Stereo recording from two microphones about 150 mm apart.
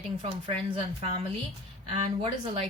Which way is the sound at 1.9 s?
40° right (ahead or behind).